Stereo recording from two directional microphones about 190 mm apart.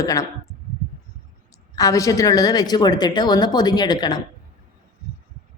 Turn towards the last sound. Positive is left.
turn(degrees=20)  # may be behind; listen again after turning